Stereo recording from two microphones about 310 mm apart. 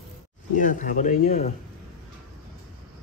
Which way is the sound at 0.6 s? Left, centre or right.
Left.